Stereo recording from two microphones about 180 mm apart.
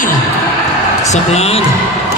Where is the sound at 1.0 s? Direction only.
40° left (ahead or behind).